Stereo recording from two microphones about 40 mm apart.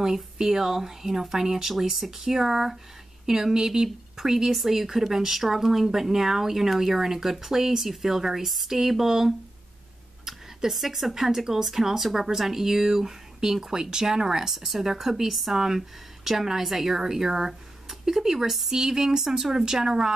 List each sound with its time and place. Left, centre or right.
0.0 s speech: centre